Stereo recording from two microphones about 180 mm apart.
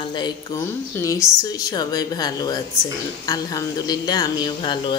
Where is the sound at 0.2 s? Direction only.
15° left (ahead or behind).